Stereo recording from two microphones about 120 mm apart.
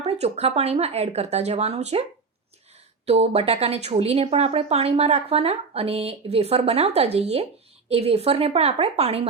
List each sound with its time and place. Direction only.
0.0 s speech: 60° right (ahead or behind)
3.1 s speech: 60° right (ahead or behind)